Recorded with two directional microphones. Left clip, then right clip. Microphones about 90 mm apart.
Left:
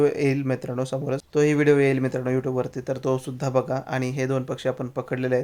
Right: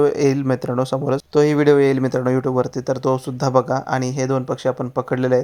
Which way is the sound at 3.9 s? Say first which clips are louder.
Right 4 dB; 35° right (ahead or behind).